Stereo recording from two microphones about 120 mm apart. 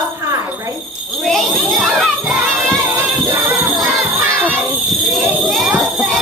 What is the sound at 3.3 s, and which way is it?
Music, 15° right (ahead or behind).